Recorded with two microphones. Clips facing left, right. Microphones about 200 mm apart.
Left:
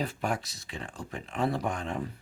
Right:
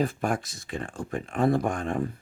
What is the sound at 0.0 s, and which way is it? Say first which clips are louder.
Speech: right 5 dB; 50° right (ahead or behind).